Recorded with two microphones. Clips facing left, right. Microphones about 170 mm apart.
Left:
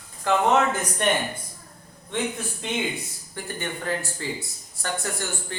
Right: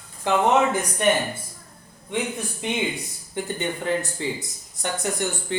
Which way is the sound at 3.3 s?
20° right (ahead or behind).